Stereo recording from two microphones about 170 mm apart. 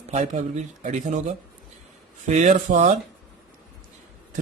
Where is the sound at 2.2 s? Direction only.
45° right (ahead or behind).